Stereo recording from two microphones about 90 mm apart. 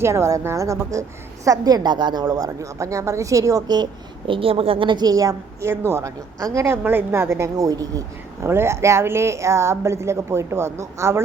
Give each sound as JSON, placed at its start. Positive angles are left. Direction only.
{"t": 0.0, "sound": "a woman's voice", "side_deg": -30}
{"t": 1.5, "sound": "a woman's voice", "side_deg": -45}
{"t": 4.3, "sound": "a woman's voice", "side_deg": -90}
{"t": 8.4, "sound": "a woman's voice", "side_deg": -30}